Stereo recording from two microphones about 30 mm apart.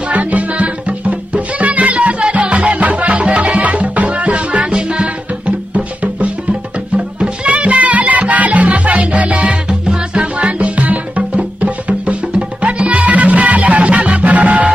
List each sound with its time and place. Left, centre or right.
0.1 s music: right
7.2 s music: right
7.6 s music: right
9.5 s music: right
10.2 s music: right